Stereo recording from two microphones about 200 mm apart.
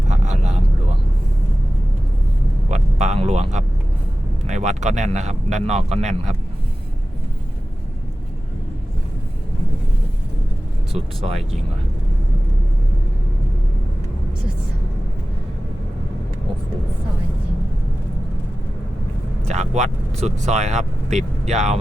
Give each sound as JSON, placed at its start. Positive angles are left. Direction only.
{"t": 0.1, "sound": "vehicle", "side_deg": -35}
{"t": 2.6, "sound": "vehicle", "side_deg": -35}
{"t": 4.4, "sound": "speech", "side_deg": -35}
{"t": 10.9, "sound": "speech", "side_deg": -30}
{"t": 19.5, "sound": "speech", "side_deg": -35}